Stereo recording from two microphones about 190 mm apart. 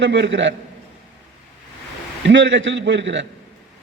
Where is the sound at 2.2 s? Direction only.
70° right (ahead or behind).